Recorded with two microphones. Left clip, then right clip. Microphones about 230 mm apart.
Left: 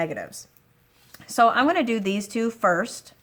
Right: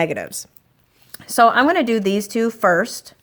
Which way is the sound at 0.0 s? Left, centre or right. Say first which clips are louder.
Right 7 dB; right.